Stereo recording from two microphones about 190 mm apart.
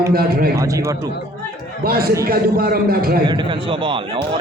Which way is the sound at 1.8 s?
55° right (ahead or behind).